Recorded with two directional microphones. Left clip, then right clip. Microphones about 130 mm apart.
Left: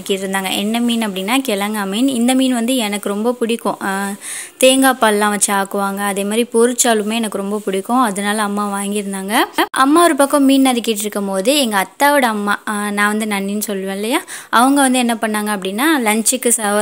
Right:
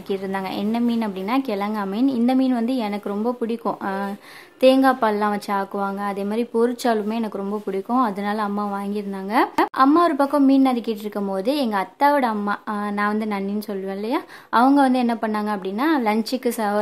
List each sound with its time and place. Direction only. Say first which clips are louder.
0.1 s a woman's voice: left 7 dB; 20° left (ahead or behind)